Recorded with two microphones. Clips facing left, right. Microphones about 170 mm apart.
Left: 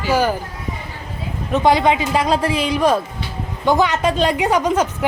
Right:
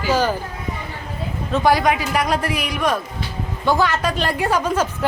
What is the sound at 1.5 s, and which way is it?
A woman's voice, 20° left (ahead or behind).